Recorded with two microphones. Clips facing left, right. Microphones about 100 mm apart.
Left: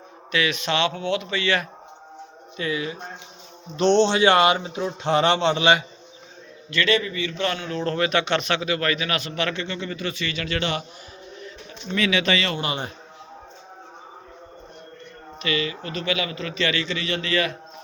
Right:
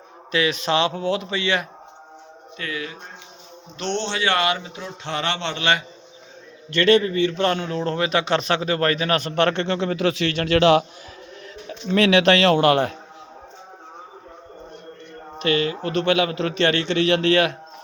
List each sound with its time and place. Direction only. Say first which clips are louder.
0.3 s a man's voice: right 3 dB; 30° right (ahead or behind)
2.6 s speech: left 4 dB; 10° left (ahead or behind)
6.7 s a man's voice: right 6 dB; 50° right (ahead or behind); by 10.8 s 90° right
11.3 s a man's voice: right 6 dB; 75° right (ahead or behind)
15.4 s a man's voice: right 5 dB; 55° right (ahead or behind)